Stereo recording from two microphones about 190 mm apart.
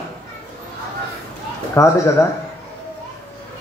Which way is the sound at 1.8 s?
15° left (ahead or behind).